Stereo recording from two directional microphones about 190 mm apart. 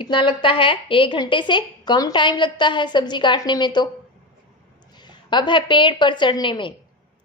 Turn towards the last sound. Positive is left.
turn(degrees=25)  # may be behind; listen again after turning